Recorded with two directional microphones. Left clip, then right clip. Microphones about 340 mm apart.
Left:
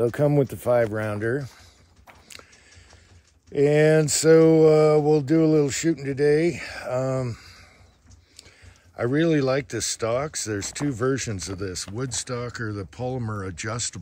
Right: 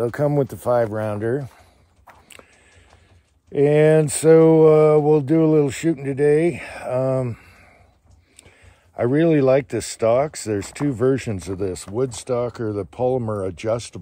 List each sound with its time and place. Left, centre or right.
0.0 s speech: centre
2.4 s music: centre
3.5 s mantra: centre
8.5 s speech: centre